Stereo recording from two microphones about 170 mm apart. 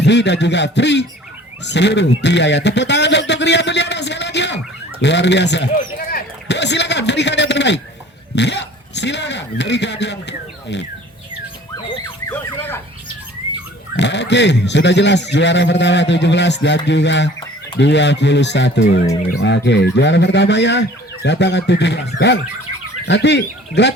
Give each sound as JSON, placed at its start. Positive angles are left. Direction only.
{"t": 0.0, "sound": "a man's voice", "side_deg": 90}
{"t": 6.1, "sound": "a man's voice", "side_deg": 75}
{"t": 12.3, "sound": "a sound", "side_deg": 15}
{"t": 13.9, "sound": "speech", "side_deg": 90}